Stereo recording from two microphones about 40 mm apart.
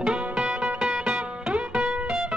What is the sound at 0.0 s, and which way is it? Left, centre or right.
Music, right.